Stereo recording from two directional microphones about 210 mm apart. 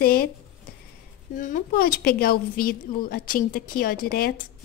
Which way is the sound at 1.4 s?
40° left (ahead or behind).